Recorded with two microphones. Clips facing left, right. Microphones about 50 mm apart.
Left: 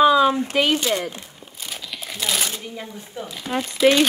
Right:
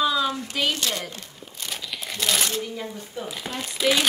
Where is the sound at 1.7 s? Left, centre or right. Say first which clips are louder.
Even; centre.